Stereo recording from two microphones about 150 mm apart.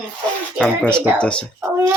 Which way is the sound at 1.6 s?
15° right (ahead or behind).